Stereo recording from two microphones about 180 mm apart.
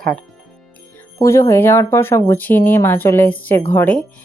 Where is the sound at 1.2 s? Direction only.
15° left (ahead or behind).